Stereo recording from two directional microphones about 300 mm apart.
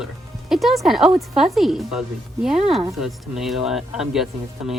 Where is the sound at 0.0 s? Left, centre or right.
Centre.